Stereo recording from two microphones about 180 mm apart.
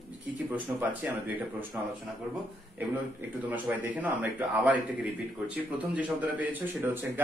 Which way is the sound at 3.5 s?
10° right (ahead or behind).